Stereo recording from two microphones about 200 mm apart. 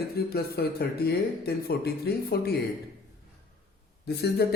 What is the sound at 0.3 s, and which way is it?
A man's voice, 50° left (ahead or behind).